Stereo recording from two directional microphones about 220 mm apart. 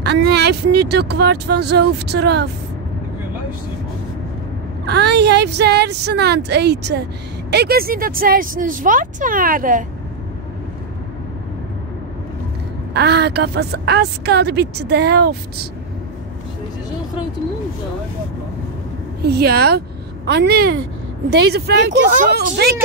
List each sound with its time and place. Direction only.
0.0 s a woman's voice: 50° right (ahead or behind)
4.8 s a woman's voice: 50° right (ahead or behind)
12.9 s a woman's voice: 50° right (ahead or behind)
19.2 s a woman's voice: 45° right (ahead or behind)